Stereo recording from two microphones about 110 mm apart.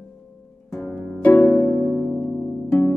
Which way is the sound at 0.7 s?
10° left (ahead or behind).